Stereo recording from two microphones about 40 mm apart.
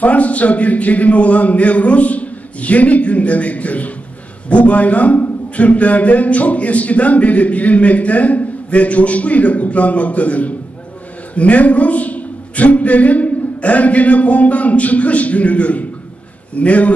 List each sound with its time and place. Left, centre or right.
0.0 s a man's voice: left